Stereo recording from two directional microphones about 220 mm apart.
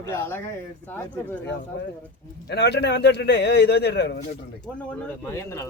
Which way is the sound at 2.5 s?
50° left (ahead or behind).